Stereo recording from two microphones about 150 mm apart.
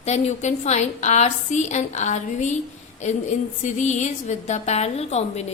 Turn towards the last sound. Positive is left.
turn(degrees=45)  # may be behind; listen again after turning